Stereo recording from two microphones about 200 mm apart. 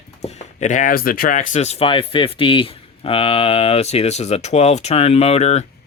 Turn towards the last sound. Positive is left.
turn(degrees=35)  # may be behind; listen again after turning